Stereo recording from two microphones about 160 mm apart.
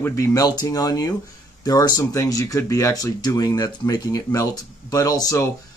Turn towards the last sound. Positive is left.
turn(degrees=20)  # may be behind; listen again after turning